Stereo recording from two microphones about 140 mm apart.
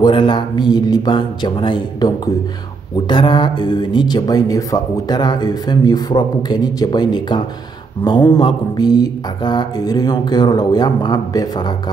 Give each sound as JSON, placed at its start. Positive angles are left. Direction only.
{"t": 0.0, "sound": "speech", "side_deg": 35}